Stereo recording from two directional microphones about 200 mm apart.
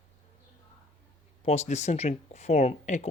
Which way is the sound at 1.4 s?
35° left (ahead or behind).